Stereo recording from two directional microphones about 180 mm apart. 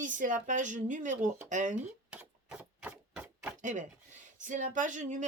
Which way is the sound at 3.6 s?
45° right (ahead or behind).